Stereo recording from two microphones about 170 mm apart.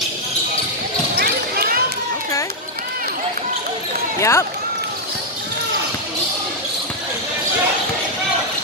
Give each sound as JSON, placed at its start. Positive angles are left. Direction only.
{"t": 1.1, "sound": "basketball bounce", "side_deg": -65}
{"t": 4.2, "sound": "speech", "side_deg": 15}